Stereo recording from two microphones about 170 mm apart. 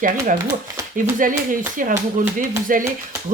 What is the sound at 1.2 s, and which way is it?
Speech, 50° right (ahead or behind).